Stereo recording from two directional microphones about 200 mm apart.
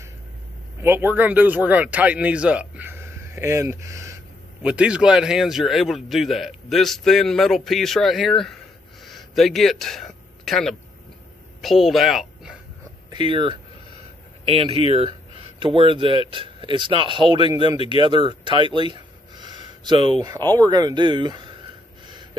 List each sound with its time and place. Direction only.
0.8 s a man's voice: 10° right (ahead or behind)
9.0 s a sound: centre (ahead or behind)
11.6 s speech: centre (ahead or behind)
13.1 s speech: 25° right (ahead or behind)
18.8 s a sound: 25° right (ahead or behind)
20.2 s speech: 20° right (ahead or behind)
22.0 s gasp: 20° right (ahead or behind)